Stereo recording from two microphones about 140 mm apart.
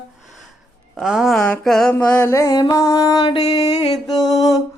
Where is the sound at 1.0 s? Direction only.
5° right (ahead or behind).